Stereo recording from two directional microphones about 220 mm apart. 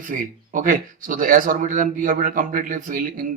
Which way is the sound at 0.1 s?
35° right (ahead or behind).